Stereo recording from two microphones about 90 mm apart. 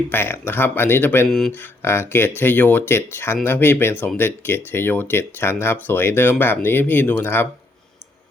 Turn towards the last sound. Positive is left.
turn(degrees=25)  # may be behind; listen again after turning